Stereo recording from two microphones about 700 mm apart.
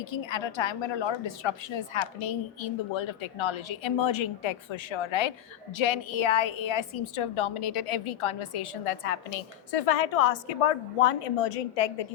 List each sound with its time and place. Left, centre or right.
0.0 s a woman's voice: left